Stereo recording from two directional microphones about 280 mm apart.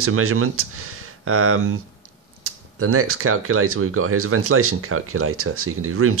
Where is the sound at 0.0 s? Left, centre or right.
Right.